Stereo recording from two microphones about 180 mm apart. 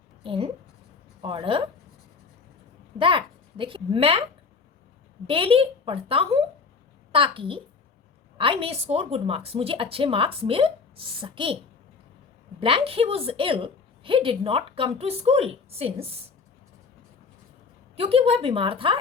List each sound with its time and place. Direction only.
0.2 s a child's voice: 30° right (ahead or behind)
3.0 s speech: 30° right (ahead or behind)
5.2 s a woman's voice: 30° right (ahead or behind)
12.5 s a woman's voice: 30° right (ahead or behind)
17.9 s a woman's voice: 35° right (ahead or behind)